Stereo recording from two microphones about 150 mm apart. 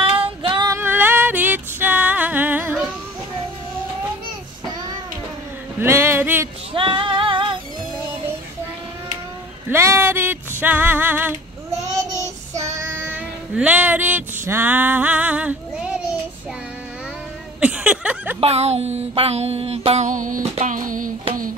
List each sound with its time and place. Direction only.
0.4 s female singing: 30° right (ahead or behind)
0.7 s music: 15° right (ahead or behind)
5.8 s a sound: 15° right (ahead or behind)
6.7 s female singing: 35° right (ahead or behind)
9.7 s a sound: 15° right (ahead or behind)
12.5 s child singing: 20° right (ahead or behind)
17.6 s a sound: 5° right (ahead or behind)
18.4 s music: 45° right (ahead or behind); by 20.4 s 60° right (ahead or behind)
20.5 s child singing: 55° right (ahead or behind)